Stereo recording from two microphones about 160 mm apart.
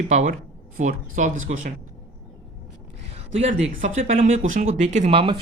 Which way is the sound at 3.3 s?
45° right (ahead or behind).